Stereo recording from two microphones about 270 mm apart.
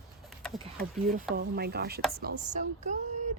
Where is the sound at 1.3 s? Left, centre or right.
Right.